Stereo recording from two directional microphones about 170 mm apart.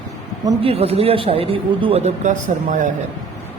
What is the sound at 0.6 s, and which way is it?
Speech, 35° right (ahead or behind).